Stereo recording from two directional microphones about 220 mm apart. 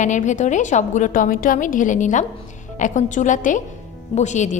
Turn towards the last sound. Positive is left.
turn(degrees=30)  # may be behind; listen again after turning